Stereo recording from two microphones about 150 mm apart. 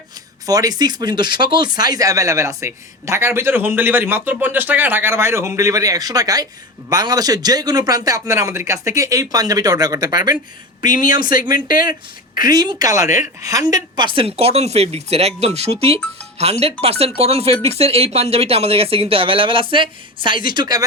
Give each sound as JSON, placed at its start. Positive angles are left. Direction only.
{"t": 0.4, "sound": "speech", "side_deg": -25}
{"t": 11.7, "sound": "speech", "side_deg": 70}
{"t": 12.4, "sound": "speech", "side_deg": -25}